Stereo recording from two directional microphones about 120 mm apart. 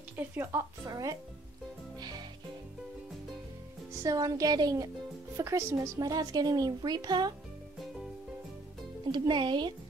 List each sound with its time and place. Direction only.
0.2 s a woman's voice: 20° right (ahead or behind)
0.8 s a woman's voice: 35° right (ahead or behind)
4.0 s a woman's voice: 30° right (ahead or behind)
9.1 s a woman's voice: 35° right (ahead or behind)